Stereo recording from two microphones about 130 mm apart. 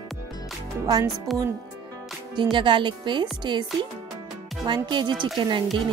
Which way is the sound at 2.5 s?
40° right (ahead or behind).